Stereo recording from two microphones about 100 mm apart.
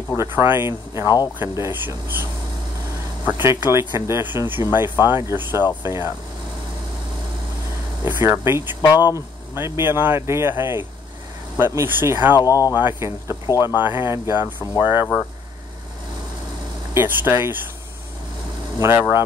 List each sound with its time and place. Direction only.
0.2 s speech: 25° right (ahead or behind)
1.0 s speech: 40° left (ahead or behind)
1.4 s speech: 25° right (ahead or behind)
3.3 s speech: 20° right (ahead or behind)
8.0 s speech: 25° right (ahead or behind)
12.4 s speech: 35° left (ahead or behind)
12.7 s speech: 25° right (ahead or behind)
16.9 s speech: 25° right (ahead or behind)
18.8 s speech: 25° right (ahead or behind)